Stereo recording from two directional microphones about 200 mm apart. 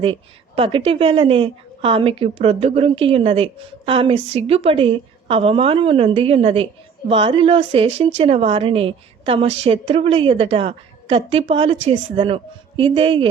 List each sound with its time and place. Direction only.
0.0 s speech: 30° right (ahead or behind)